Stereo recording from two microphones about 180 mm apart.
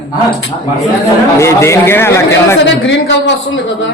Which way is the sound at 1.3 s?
15° left (ahead or behind).